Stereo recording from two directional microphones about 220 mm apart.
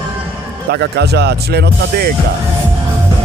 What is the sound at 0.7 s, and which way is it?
Speech, 50° right (ahead or behind).